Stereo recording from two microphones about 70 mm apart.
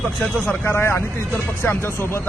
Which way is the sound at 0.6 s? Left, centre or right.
Left.